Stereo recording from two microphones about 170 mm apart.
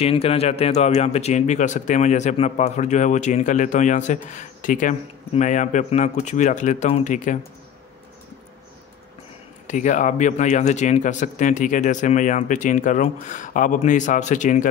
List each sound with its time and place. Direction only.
0.0 s speech: 35° left (ahead or behind)
9.7 s speech: 45° left (ahead or behind)